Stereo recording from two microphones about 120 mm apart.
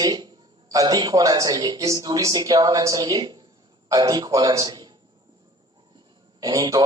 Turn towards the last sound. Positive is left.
turn(degrees=-30)  # may be behind; listen again after turning